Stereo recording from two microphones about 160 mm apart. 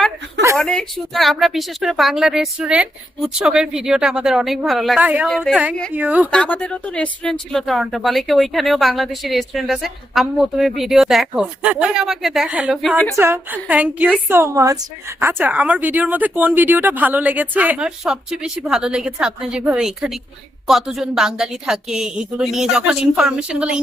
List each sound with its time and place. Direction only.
0.5 s speech: 5° left (ahead or behind)
6.3 s speech: 5° left (ahead or behind)
13.1 s speech: 15° right (ahead or behind)